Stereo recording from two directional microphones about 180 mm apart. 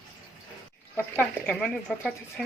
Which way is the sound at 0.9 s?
10° left (ahead or behind).